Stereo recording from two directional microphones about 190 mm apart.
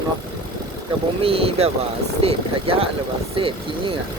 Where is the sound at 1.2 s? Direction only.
30° right (ahead or behind).